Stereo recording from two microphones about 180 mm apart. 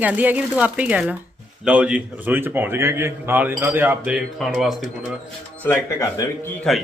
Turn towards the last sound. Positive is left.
turn(degrees=0)  # may be behind; listen again after turning